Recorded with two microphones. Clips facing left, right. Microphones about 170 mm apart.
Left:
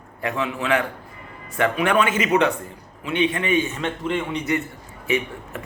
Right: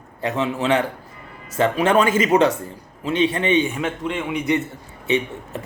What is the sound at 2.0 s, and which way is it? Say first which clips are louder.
Speech: right 3 dB; 35° right (ahead or behind).